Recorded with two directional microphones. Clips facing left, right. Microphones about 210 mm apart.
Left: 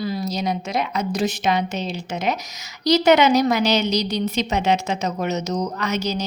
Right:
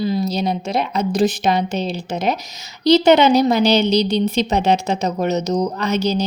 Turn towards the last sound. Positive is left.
turn(degrees=-30)  # may be behind; listen again after turning